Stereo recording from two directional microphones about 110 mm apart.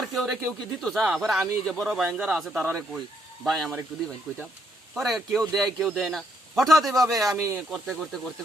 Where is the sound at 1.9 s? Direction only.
5° right (ahead or behind).